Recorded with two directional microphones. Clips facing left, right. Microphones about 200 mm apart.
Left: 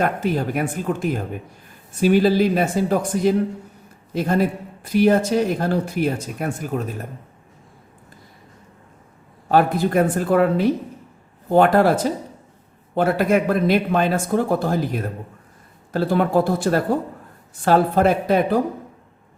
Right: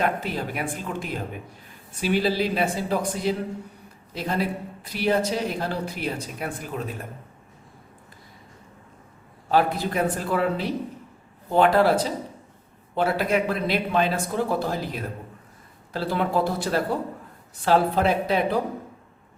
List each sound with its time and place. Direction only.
0.0 s speech: 45° left (ahead or behind)
9.5 s speech: 50° left (ahead or behind)